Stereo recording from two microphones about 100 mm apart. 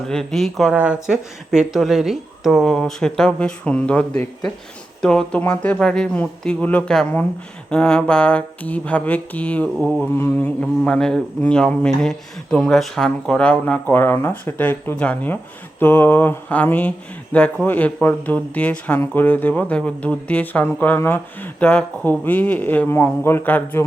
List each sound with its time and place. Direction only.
0.1 s speech: 5° left (ahead or behind)
0.7 s speech: 10° right (ahead or behind); by 15.4 s 15° left (ahead or behind)
15.8 s mantra: 20° left (ahead or behind)
17.3 s speech: 15° left (ahead or behind)